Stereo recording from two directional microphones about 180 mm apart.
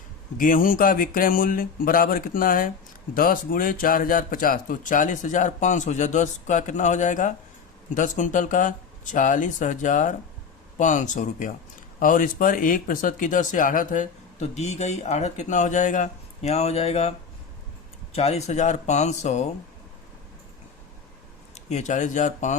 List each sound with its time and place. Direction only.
0.3 s speech: 50° left (ahead or behind)
21.5 s speech: 40° left (ahead or behind)